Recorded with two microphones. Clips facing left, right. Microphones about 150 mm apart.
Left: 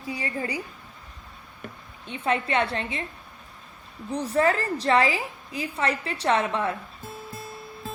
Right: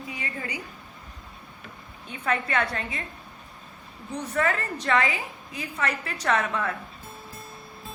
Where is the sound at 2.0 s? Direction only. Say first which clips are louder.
Left 2 dB; 30° left (ahead or behind).